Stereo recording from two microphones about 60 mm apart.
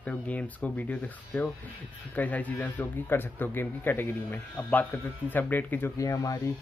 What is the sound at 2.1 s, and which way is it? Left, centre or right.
Speech, left.